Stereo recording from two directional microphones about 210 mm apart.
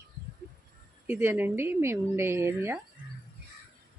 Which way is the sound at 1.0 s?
10° right (ahead or behind).